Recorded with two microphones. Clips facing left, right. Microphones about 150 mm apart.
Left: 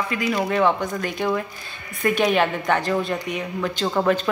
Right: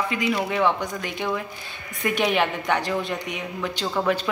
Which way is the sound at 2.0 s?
15° right (ahead or behind).